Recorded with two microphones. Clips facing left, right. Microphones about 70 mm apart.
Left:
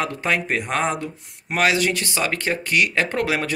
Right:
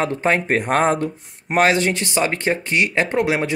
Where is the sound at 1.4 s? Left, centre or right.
Right.